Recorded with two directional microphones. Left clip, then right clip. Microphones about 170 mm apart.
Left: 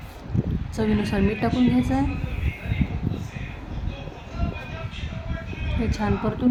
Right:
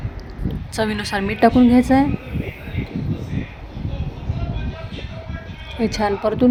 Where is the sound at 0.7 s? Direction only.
45° right (ahead or behind).